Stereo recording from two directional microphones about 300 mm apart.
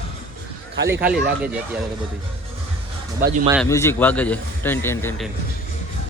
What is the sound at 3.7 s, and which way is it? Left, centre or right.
A man's voice, centre.